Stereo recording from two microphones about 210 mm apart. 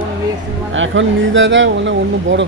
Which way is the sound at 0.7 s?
65° right (ahead or behind).